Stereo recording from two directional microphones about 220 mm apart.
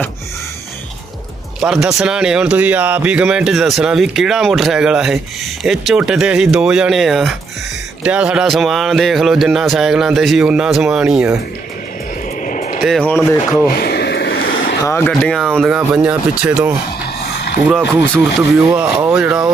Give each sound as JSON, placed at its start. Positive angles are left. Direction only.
{"t": 1.6, "sound": "speech", "side_deg": 0}
{"t": 12.5, "sound": "vehicle", "side_deg": 35}
{"t": 12.8, "sound": "speech", "side_deg": 5}
{"t": 13.7, "sound": "a sound", "side_deg": 45}
{"t": 14.8, "sound": "speech", "side_deg": 10}
{"t": 18.3, "sound": "speech", "side_deg": -5}